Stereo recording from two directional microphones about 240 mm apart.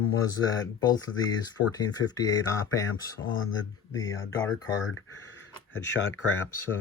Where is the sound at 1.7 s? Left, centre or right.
Centre.